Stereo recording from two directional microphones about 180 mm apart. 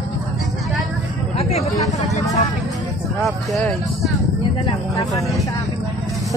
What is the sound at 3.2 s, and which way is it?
Speech, centre (ahead or behind).